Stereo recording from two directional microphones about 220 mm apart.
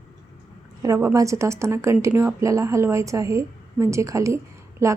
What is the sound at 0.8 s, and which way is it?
Speech, 15° right (ahead or behind).